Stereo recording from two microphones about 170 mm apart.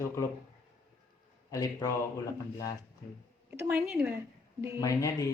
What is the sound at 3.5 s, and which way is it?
Speech, 15° right (ahead or behind).